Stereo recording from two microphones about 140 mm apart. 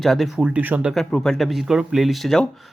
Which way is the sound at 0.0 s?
Centre (ahead or behind).